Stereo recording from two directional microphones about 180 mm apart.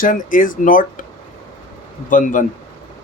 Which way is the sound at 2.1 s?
45° left (ahead or behind).